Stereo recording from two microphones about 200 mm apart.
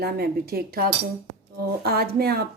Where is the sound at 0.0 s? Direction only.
50° right (ahead or behind).